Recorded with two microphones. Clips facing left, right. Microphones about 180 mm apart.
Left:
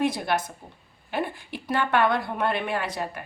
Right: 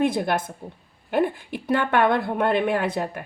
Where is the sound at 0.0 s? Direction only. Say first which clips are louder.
Right 3 dB; 55° right (ahead or behind).